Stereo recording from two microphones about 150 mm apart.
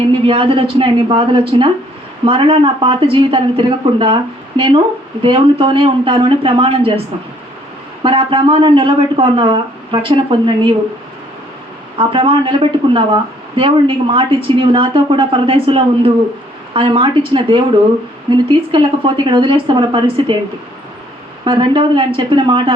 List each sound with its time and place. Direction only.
0.3 s speech: 35° right (ahead or behind)
8.0 s speech: 35° right (ahead or behind)
11.9 s speech: 35° right (ahead or behind)
21.4 s speech: 35° right (ahead or behind)